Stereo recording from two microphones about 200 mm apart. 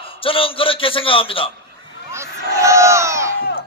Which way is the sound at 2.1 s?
15° right (ahead or behind).